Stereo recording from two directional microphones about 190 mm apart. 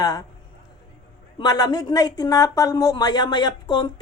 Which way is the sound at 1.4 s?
20° left (ahead or behind).